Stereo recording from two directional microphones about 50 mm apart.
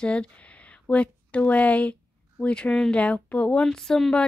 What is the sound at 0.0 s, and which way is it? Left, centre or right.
Speech, left.